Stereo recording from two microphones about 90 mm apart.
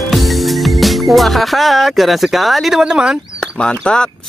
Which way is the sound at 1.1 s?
Centre (ahead or behind).